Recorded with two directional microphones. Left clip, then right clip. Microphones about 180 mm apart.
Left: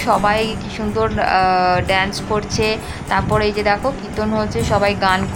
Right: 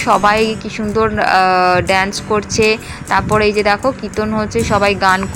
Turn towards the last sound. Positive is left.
turn(degrees=-20)  # may be behind; listen again after turning